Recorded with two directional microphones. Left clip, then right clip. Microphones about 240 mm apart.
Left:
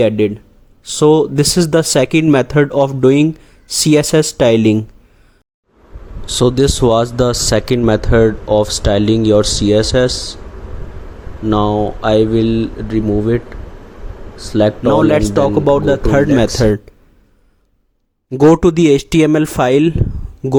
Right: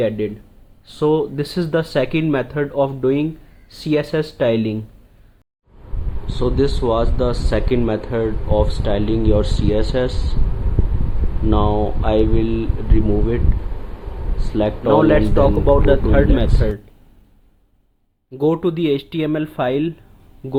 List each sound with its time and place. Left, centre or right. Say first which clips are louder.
0.9 s speech: left 7 dB; left
6.3 s speech: left 7 dB; left
11.4 s speech: left 4 dB; left
14.5 s speech: left 7 dB; left
14.8 s speech: right 1 dB; left
18.3 s speech: left 9 dB; left